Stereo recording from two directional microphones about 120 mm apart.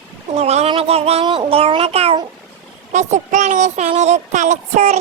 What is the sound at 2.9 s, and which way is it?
A child's voice, 85° right.